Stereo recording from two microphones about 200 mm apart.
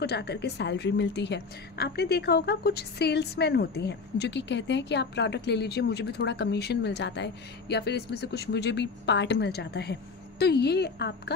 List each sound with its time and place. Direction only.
0.0 s a woman's voice: 55° left (ahead or behind)